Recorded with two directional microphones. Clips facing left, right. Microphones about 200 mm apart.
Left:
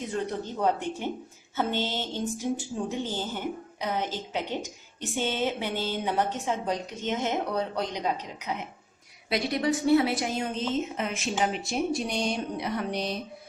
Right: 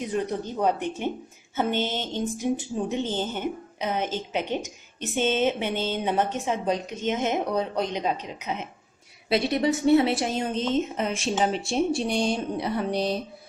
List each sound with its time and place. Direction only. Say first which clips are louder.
0.0 s a woman's voice: right 3 dB; 15° right (ahead or behind); by 13.1 s 30° right (ahead or behind)